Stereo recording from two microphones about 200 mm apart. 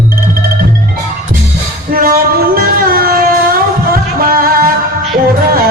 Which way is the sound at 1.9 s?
45° right (ahead or behind).